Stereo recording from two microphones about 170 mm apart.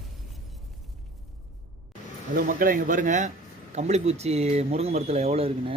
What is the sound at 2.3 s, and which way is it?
Speech, 55° right (ahead or behind).